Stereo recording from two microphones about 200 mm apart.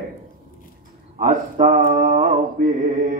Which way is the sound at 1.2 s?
40° right (ahead or behind).